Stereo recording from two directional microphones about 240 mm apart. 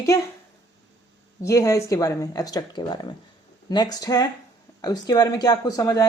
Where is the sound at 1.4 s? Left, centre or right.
Centre.